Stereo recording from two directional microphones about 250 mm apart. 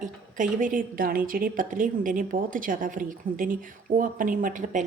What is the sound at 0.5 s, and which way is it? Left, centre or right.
A woman's voice, right.